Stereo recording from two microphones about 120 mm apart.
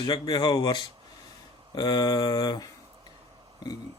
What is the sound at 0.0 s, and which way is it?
Speech, 35° left (ahead or behind).